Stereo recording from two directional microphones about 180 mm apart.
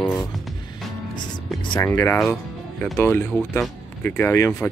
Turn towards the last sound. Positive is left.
turn(degrees=15)  # may be behind; listen again after turning